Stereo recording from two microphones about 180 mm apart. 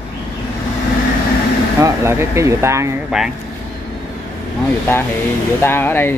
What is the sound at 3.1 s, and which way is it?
Speech, 5° right (ahead or behind).